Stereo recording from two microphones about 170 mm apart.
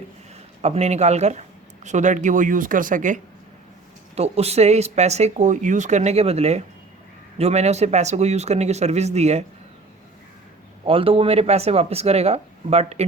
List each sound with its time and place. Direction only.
0.6 s speech: 40° right (ahead or behind)
4.1 s speech: 40° right (ahead or behind)
10.8 s speech: 30° right (ahead or behind)